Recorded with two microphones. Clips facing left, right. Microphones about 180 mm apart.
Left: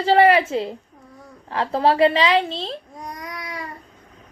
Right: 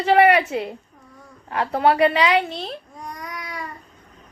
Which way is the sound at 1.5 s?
25° left (ahead or behind).